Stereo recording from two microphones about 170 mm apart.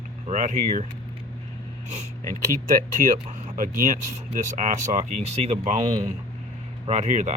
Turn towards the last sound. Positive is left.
turn(degrees=-45)  # may be behind; listen again after turning